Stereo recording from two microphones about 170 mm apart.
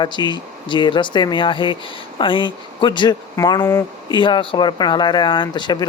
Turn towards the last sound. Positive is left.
turn(degrees=25)  # may be behind; listen again after turning